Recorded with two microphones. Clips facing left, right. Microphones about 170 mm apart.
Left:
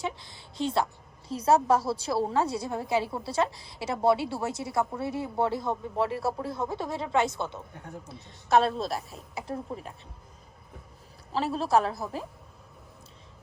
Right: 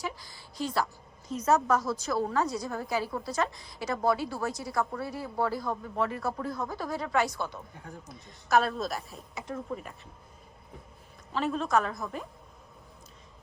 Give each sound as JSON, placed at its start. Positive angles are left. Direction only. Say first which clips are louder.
{"t": 0.0, "sound": "a woman's voice", "louder": "left 3 dB", "side_deg": 25}
{"t": 11.3, "sound": "a woman's voice", "louder": "left 2 dB", "side_deg": 35}